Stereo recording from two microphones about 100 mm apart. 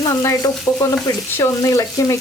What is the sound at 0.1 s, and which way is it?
Speech, 30° left (ahead or behind).